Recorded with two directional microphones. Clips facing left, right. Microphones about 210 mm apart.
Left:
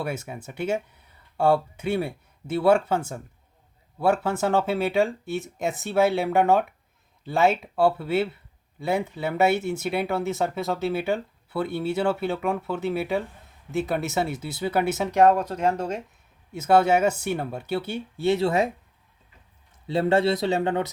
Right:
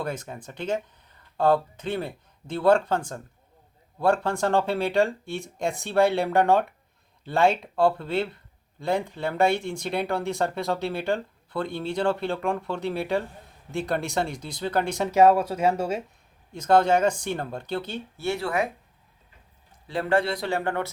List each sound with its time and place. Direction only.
0.0 s speech: 10° left (ahead or behind); by 16.0 s 10° right (ahead or behind)
16.5 s speech: 5° left (ahead or behind); by 18.7 s 25° left (ahead or behind)
19.9 s speech: 25° left (ahead or behind)